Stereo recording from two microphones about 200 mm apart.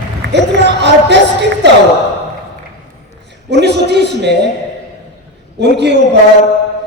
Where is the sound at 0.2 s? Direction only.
65° right (ahead or behind).